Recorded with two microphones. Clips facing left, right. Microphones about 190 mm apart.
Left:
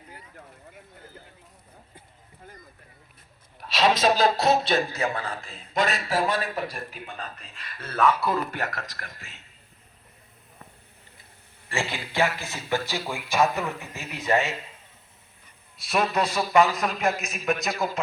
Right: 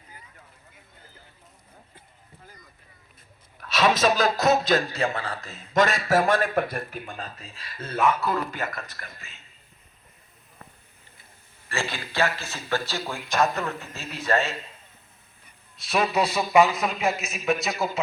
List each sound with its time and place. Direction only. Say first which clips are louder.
3.7 s a sound: even; 50° right (ahead or behind)
4.4 s a man's voice: right 1 dB; 40° right (ahead or behind)
7.3 s speech: right 4 dB; 25° right (ahead or behind)
8.4 s a man's voice: left 1 dB; 65° left (ahead or behind); by 9.4 s 80° left
11.7 s a man's voice: left 1 dB; 25° left (ahead or behind)
11.9 s speech: left 1 dB; 10° left (ahead or behind)
15.9 s speech: right 1 dB; centre (ahead or behind)